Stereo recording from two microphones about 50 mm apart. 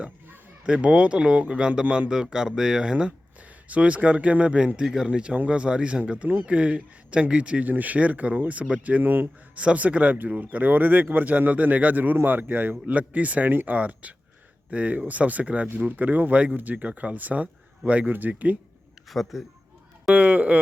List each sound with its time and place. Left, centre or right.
0.6 s a man's voice: right
3.7 s a man's voice: right
7.6 s speech: right
9.6 s a man's voice: right
19.1 s a man's voice: centre
20.1 s a man's voice: right